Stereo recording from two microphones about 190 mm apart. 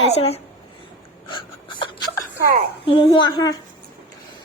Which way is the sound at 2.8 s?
25° left (ahead or behind).